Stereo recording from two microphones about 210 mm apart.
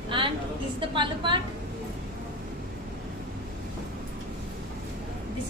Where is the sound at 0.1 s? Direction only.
25° right (ahead or behind).